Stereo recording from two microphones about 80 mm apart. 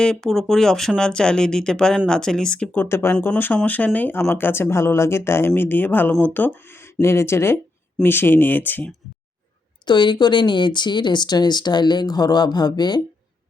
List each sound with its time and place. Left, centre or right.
0.0 s speech: centre
2.8 s speech: left
9.8 s speech: left